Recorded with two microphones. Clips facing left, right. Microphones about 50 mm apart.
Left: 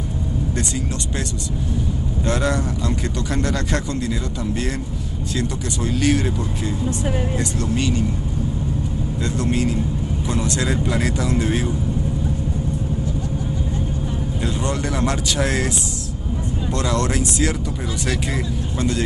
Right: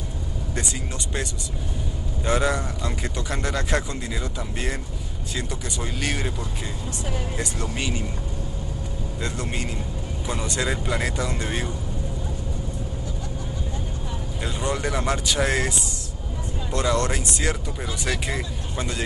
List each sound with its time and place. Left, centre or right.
2.2 s a man's voice: centre
7.3 s a man's voice: centre
9.2 s speech: centre
14.4 s speech: centre
16.7 s speech: centre